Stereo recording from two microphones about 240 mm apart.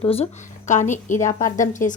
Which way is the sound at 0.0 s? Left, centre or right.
Left.